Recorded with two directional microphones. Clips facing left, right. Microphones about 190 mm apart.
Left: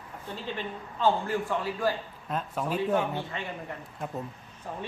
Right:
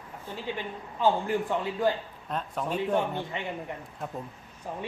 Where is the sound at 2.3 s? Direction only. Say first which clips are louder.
Left 1 dB; 5° left (ahead or behind).